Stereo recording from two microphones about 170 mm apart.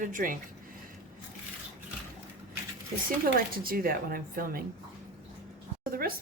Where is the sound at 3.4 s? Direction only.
60° right (ahead or behind).